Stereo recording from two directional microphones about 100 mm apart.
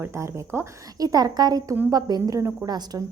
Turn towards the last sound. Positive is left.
turn(degrees=-35)  # may be behind; listen again after turning